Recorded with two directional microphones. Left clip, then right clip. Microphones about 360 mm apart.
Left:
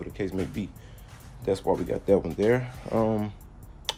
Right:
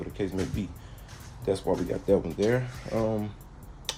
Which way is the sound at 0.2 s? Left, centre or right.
Centre.